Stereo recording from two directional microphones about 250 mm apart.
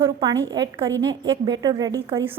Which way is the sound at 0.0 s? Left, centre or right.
Centre.